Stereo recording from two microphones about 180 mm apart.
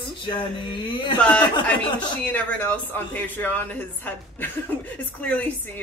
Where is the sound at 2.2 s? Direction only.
5° left (ahead or behind).